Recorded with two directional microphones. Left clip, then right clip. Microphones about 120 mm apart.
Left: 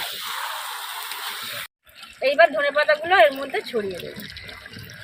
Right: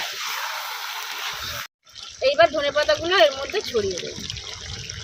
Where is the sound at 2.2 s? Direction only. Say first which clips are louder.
Left 1 dB; 75° right (ahead or behind).